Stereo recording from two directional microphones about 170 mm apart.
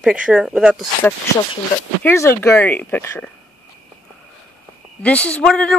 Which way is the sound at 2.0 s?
15° left (ahead or behind).